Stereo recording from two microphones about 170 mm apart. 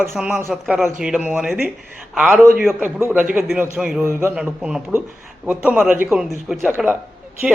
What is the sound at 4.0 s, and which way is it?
A man's voice, 15° right (ahead or behind).